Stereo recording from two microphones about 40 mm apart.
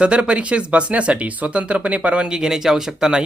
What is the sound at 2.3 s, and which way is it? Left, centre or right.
Speech, centre.